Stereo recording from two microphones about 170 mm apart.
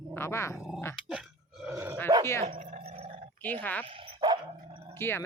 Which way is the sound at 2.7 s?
40° right (ahead or behind).